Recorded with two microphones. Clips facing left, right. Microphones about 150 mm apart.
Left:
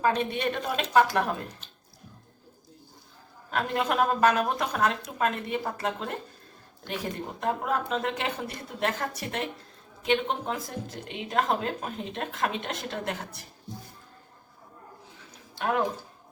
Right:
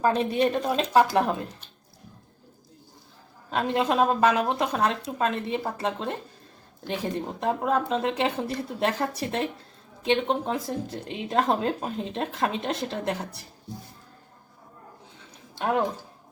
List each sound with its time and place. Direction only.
0.0 s speech: 35° right (ahead or behind)
3.5 s a woman's voice: 25° right (ahead or behind)